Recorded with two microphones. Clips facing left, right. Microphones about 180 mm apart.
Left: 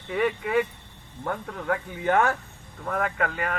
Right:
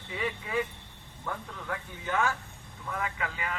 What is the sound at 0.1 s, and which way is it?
Speech, 65° left (ahead or behind).